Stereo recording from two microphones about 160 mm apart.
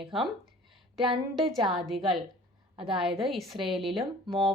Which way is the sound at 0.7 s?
Centre (ahead or behind).